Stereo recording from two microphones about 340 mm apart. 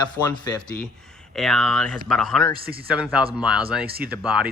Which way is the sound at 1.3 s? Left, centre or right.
Centre.